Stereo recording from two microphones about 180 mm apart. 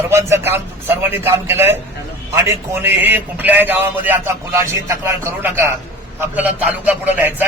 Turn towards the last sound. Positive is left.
turn(degrees=-10)  # may be behind; listen again after turning